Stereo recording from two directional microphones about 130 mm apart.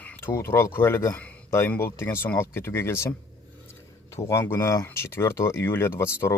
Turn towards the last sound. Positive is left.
turn(degrees=20)  # may be behind; listen again after turning